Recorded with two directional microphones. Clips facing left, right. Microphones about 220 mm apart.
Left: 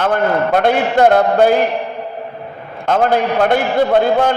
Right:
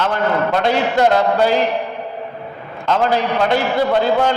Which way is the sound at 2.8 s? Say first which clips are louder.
Left 3 dB; 50° left (ahead or behind).